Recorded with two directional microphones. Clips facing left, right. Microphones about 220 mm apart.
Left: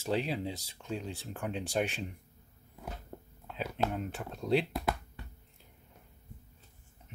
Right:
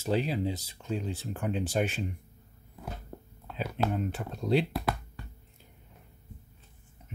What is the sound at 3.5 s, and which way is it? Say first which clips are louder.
Speech: right 3 dB; centre (ahead or behind).